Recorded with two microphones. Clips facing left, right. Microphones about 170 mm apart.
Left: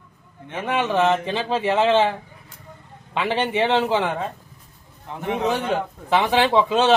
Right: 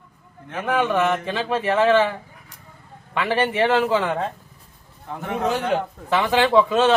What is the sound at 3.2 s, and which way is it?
Speech, 20° left (ahead or behind).